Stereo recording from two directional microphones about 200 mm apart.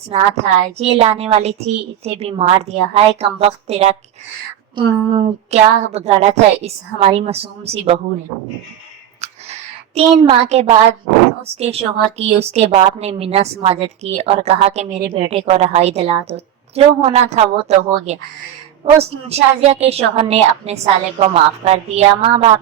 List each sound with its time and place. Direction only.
0.1 s a woman's voice: 30° right (ahead or behind)
9.2 s a sound: 30° right (ahead or behind)
11.4 s a woman's voice: 30° right (ahead or behind)